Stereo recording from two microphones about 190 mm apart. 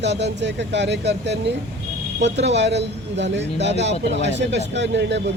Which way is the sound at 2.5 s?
65° right (ahead or behind).